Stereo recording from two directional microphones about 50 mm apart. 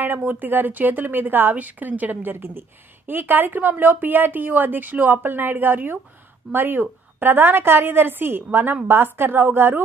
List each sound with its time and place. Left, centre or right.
0.0 s a woman's voice: right